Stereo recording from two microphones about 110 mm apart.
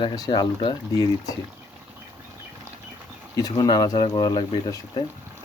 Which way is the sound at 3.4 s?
35° left (ahead or behind).